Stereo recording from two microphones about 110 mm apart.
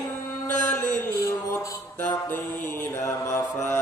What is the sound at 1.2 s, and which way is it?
Mantra, 30° left (ahead or behind).